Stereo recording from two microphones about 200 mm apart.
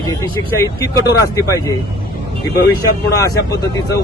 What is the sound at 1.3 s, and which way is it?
Speech, 15° left (ahead or behind).